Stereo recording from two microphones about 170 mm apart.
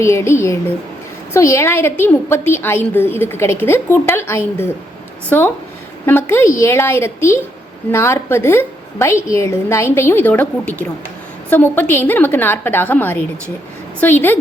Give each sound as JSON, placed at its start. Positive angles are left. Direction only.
{"t": 0.0, "sound": "a woman's voice", "side_deg": 15}